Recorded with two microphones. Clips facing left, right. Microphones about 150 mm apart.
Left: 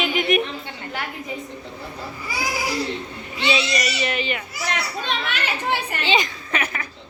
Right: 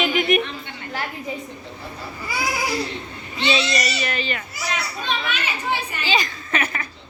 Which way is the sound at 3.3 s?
10° left (ahead or behind).